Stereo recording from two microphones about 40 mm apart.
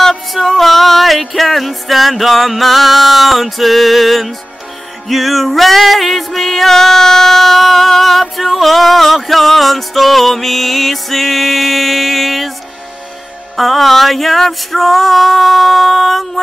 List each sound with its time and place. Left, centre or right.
0.0 s music: centre
13.6 s music: centre